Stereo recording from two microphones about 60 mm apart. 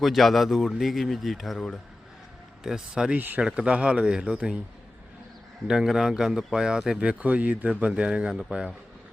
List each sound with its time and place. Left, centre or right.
0.0 s speech: centre
1.5 s speech: centre
2.6 s a man's voice: centre
3.1 s speech: right
3.4 s a man's voice: centre
5.6 s a man's voice: centre